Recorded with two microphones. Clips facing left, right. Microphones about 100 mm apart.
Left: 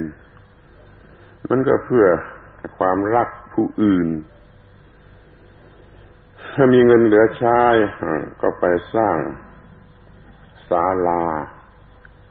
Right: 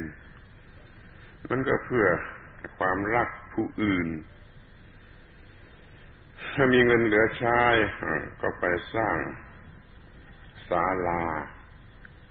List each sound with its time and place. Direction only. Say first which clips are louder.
1.4 s a man's voice: left 10 dB; 35° left (ahead or behind)
6.3 s a sound: left 7 dB; 35° left (ahead or behind)
6.7 s a man's voice: left 10 dB; 35° left (ahead or behind)
10.7 s a man's voice: left 9 dB; 35° left (ahead or behind)